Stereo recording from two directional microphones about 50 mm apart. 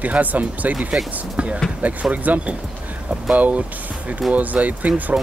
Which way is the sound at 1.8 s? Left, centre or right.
Right.